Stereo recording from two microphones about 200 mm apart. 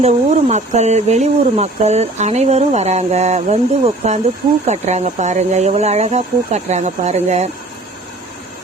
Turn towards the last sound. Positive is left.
turn(degrees=-35)  # may be behind; listen again after turning